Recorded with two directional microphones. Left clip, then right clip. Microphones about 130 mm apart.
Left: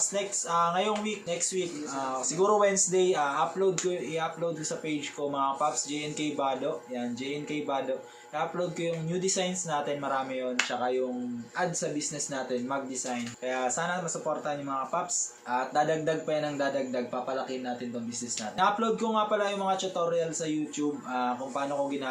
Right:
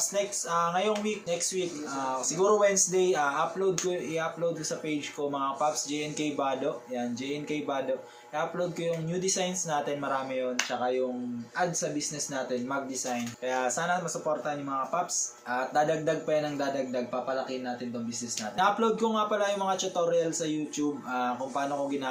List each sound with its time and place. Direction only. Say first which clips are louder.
0.1 s speech: even; 10° right (ahead or behind)
4.9 s speech: even; 15° right (ahead or behind)
8.4 s speech: even; 10° right (ahead or behind)
13.1 s speech: right 1 dB; 15° right (ahead or behind)
18.5 s speech: right 1 dB; 15° right (ahead or behind)